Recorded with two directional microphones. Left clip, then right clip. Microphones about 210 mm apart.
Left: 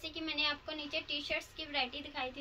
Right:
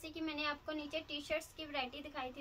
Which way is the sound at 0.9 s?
35° right (ahead or behind).